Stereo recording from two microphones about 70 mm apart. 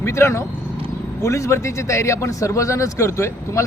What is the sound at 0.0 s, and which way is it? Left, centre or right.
A man's voice, left.